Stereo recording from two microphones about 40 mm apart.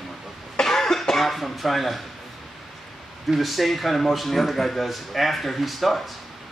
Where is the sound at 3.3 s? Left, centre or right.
Centre.